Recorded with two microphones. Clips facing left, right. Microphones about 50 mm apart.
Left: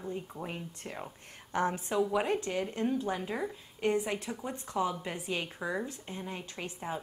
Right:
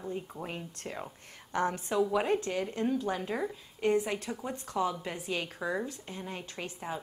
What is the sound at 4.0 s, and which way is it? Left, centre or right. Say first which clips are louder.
Speech: even; centre.